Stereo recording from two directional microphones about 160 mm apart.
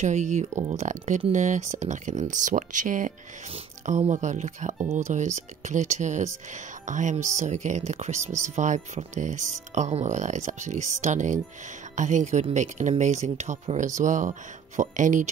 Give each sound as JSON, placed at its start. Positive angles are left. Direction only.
{"t": 0.0, "sound": "speech", "side_deg": -45}